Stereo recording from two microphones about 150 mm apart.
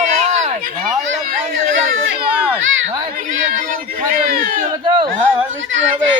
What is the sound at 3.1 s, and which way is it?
Speech, 60° right (ahead or behind).